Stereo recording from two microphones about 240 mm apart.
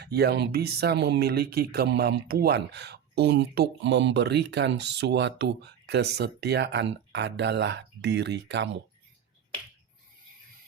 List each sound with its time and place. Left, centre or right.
0.0 s speech: right